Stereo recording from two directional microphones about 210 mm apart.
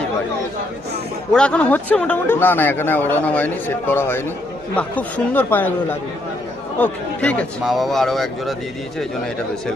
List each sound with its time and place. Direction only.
1.3 s speech: 5° left (ahead or behind)